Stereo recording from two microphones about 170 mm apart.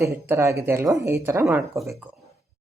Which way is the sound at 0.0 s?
15° right (ahead or behind).